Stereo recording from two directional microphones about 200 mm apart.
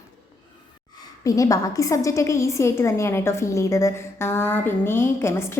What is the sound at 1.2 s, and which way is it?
A woman's voice, 15° left (ahead or behind).